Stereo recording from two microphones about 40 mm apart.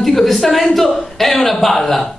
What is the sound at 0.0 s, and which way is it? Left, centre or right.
A woman's voice, centre.